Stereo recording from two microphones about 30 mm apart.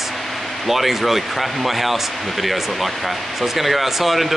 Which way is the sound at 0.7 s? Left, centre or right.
Centre.